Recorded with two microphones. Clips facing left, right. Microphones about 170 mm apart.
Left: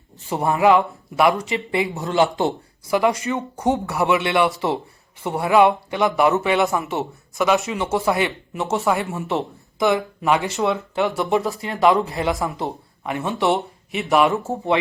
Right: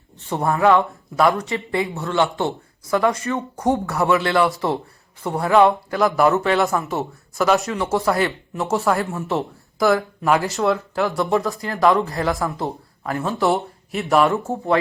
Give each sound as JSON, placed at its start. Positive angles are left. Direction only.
{"t": 0.4, "sound": "a man's voice", "side_deg": 10}
{"t": 1.9, "sound": "a man's voice", "side_deg": 15}
{"t": 3.6, "sound": "speech", "side_deg": 0}
{"t": 4.1, "sound": "speech", "side_deg": 20}
{"t": 4.4, "sound": "a man's voice", "side_deg": 0}
{"t": 6.3, "sound": "a man's voice", "side_deg": 15}
{"t": 6.9, "sound": "speech", "side_deg": 0}